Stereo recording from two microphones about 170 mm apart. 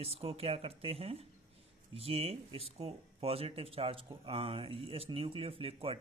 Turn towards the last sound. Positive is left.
turn(degrees=-35)  # may be behind; listen again after turning